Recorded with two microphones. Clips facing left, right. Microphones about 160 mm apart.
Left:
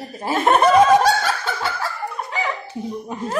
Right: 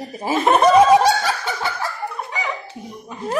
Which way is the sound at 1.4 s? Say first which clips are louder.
Even; 15° right (ahead or behind).